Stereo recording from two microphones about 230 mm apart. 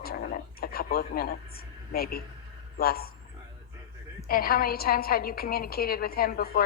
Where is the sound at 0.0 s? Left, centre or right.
Left.